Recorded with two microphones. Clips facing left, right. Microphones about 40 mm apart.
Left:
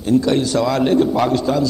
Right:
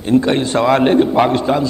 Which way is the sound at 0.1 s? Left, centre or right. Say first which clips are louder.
Right 2 dB; right.